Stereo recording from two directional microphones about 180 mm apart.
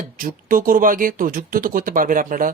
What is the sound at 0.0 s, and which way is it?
Speech, 50° right (ahead or behind).